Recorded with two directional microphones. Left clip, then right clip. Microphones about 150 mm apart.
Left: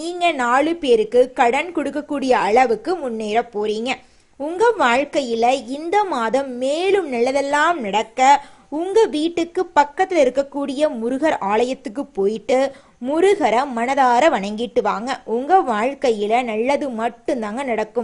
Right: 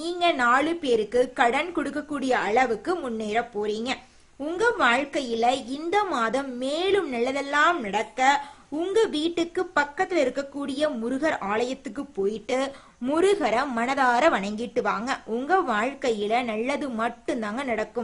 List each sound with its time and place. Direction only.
0.0 s a woman's voice: 25° left (ahead or behind)